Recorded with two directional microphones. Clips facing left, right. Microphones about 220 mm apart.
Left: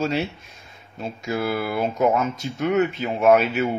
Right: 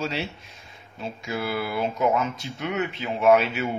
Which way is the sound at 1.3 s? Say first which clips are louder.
Left 4 dB; 50° left (ahead or behind).